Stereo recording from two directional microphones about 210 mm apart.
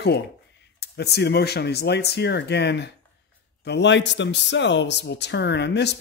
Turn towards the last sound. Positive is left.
turn(degrees=55)  # may be behind; listen again after turning